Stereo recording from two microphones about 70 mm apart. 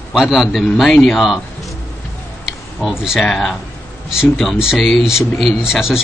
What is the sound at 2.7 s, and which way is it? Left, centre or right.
Speech, centre.